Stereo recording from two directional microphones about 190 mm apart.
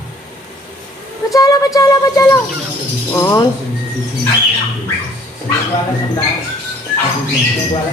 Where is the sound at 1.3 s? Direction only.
20° left (ahead or behind).